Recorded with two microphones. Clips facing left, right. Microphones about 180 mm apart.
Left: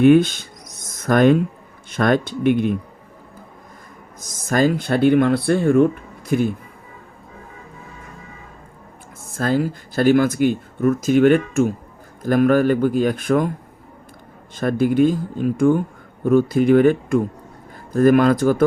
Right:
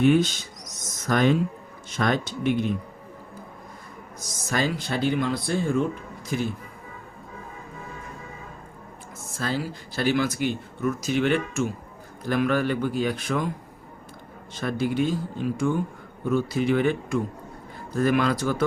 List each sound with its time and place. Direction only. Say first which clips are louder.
0.0 s a sound: left 7 dB; 55° left (ahead or behind)
1.9 s speech: left 7 dB; 55° left (ahead or behind)
4.4 s speech: left 8 dB; 50° left (ahead or behind)
9.3 s speech: left 9 dB; 50° left (ahead or behind)
14.5 s speech: left 8 dB; 50° left (ahead or behind)